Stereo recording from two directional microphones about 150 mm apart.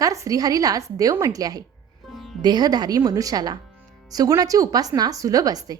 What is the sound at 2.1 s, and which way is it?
Music, centre (ahead or behind).